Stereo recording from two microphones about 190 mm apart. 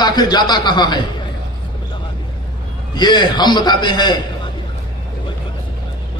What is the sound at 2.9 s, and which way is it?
A man's voice, 20° left (ahead or behind).